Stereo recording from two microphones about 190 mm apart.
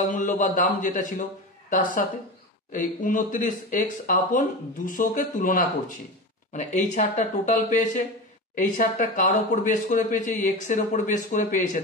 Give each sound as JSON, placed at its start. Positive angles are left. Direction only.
{"t": 0.1, "sound": "speech", "side_deg": 40}